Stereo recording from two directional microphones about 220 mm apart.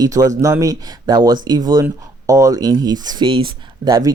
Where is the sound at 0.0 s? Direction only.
15° right (ahead or behind).